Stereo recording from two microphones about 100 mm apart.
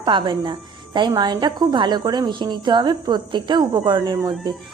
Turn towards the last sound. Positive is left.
turn(degrees=-45)  # may be behind; listen again after turning